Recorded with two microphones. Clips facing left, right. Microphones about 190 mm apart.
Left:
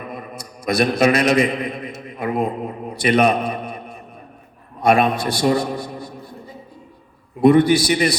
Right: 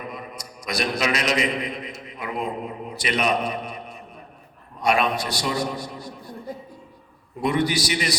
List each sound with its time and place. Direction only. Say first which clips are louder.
0.1 s a man's voice: left 4 dB; 55° left (ahead or behind)
7.4 s a man's voice: left 10 dB; 55° left (ahead or behind)